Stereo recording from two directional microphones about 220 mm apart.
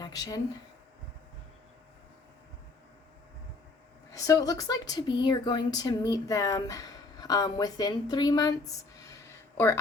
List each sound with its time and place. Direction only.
0.0 s speech: 15° left (ahead or behind)
4.1 s speech: 15° left (ahead or behind)